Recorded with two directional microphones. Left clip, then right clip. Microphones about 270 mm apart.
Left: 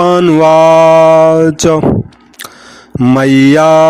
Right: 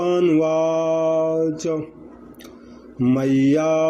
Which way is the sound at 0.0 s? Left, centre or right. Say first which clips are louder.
Left 11 dB; left.